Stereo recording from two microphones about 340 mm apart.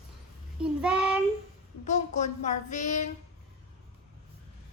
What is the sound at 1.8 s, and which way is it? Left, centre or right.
Child singing, left.